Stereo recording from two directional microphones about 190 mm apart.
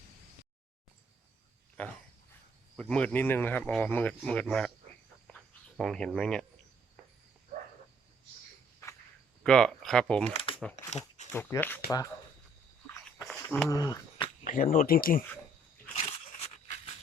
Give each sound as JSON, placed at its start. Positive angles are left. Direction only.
{"t": 2.9, "sound": "speech", "side_deg": 5}
{"t": 5.3, "sound": "cricket", "side_deg": 0}
{"t": 9.4, "sound": "speech", "side_deg": 5}
{"t": 10.8, "sound": "a sound", "side_deg": 35}
{"t": 11.3, "sound": "speech", "side_deg": 10}
{"t": 13.1, "sound": "a sound", "side_deg": 5}
{"t": 13.7, "sound": "speech", "side_deg": 20}
{"t": 14.4, "sound": "speech", "side_deg": 45}
{"t": 16.0, "sound": "a sound", "side_deg": 35}